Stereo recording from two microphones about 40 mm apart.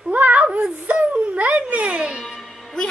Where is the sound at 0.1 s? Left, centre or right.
Right.